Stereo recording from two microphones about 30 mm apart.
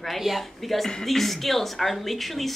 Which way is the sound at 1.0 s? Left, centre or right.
Centre.